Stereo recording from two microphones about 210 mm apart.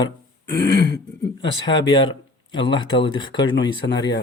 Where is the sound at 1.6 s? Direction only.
20° left (ahead or behind).